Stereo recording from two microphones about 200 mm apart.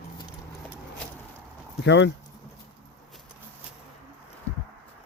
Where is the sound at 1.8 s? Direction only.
65° left (ahead or behind).